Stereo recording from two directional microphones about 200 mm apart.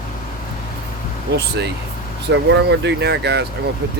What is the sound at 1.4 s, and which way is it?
Speech, 55° right (ahead or behind).